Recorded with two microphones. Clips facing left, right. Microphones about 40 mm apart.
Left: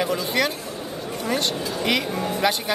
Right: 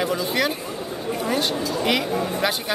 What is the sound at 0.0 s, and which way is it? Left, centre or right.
Speech, centre.